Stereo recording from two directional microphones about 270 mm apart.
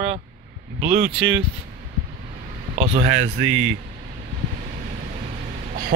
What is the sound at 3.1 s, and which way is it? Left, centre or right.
Speech, right.